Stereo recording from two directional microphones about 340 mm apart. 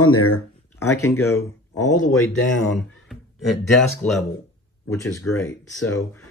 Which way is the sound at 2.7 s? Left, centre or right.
Centre.